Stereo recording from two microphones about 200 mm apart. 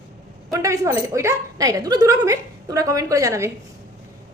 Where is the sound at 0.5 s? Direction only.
15° right (ahead or behind).